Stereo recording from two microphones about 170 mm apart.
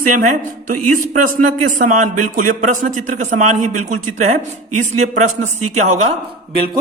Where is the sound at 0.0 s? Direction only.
50° right (ahead or behind).